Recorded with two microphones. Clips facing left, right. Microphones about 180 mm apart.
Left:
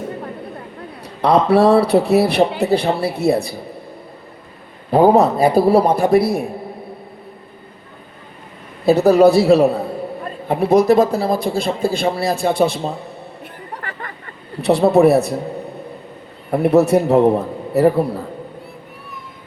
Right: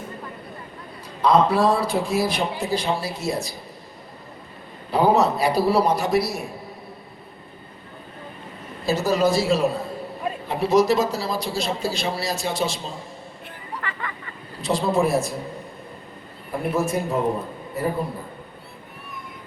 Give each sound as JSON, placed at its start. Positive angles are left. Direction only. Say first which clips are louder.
{"t": 1.2, "sound": "a man's voice", "louder": "left 5 dB", "side_deg": 65}
{"t": 4.9, "sound": "a man's voice", "louder": "left 7 dB", "side_deg": 50}
{"t": 8.9, "sound": "a man's voice", "louder": "left 10 dB", "side_deg": 60}
{"t": 14.6, "sound": "a man's voice", "louder": "left 9 dB", "side_deg": 65}
{"t": 16.5, "sound": "a man's voice", "louder": "left 11 dB", "side_deg": 70}